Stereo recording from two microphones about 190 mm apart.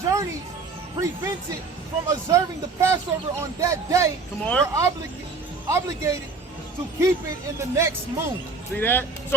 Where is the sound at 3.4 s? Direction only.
15° right (ahead or behind).